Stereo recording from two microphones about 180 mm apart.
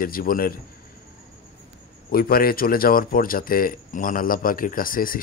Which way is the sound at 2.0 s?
55° left (ahead or behind).